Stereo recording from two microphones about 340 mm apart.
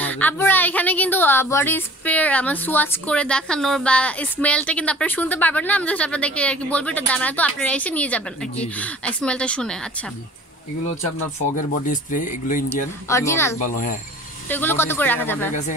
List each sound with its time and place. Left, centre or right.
0.0 s speech: centre
11.5 s speech: left
13.1 s speech: centre
13.6 s speech: left
14.5 s speech: centre